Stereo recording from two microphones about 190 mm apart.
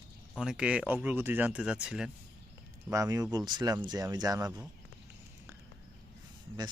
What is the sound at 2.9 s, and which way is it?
Speech, 15° right (ahead or behind).